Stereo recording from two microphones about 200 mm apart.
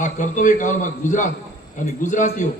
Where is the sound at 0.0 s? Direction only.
40° left (ahead or behind).